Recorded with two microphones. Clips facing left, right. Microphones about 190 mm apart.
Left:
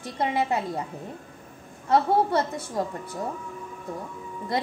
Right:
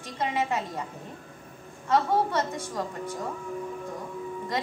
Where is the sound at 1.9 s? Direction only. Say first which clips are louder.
Left 3 dB; 30° left (ahead or behind).